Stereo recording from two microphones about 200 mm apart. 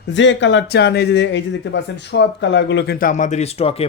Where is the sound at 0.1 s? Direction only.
65° left (ahead or behind).